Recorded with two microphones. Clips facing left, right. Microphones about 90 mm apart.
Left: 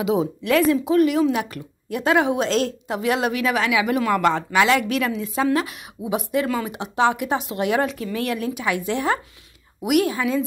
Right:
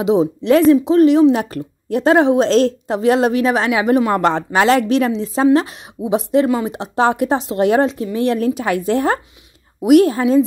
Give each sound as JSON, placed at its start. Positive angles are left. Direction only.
{"t": 0.0, "sound": "speech", "side_deg": -25}
{"t": 7.9, "sound": "speech", "side_deg": -25}
{"t": 8.4, "sound": "speech", "side_deg": -40}